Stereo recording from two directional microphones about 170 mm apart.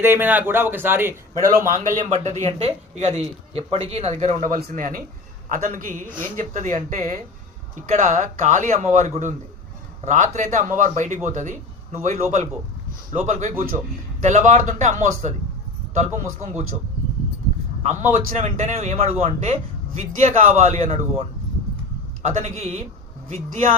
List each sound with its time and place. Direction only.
0.0 s a man's voice: 10° right (ahead or behind)
1.4 s a man's voice: 55° right (ahead or behind)
17.8 s a man's voice: 45° right (ahead or behind)